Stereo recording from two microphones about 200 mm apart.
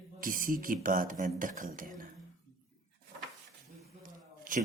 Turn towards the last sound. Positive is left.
turn(degrees=-40)  # may be behind; listen again after turning